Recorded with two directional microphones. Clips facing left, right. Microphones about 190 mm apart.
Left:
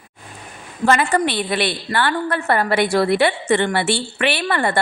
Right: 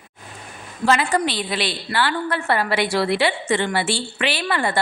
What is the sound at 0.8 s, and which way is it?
A woman's voice, 50° left (ahead or behind).